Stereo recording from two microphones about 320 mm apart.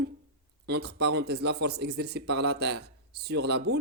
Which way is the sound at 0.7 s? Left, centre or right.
Right.